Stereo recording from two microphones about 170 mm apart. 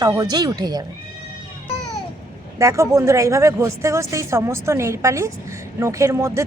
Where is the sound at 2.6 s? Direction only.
15° right (ahead or behind).